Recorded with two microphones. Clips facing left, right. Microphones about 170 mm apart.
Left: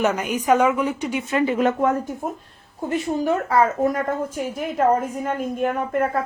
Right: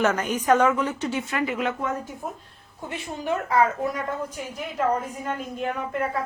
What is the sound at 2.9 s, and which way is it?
A woman's voice, 40° left (ahead or behind).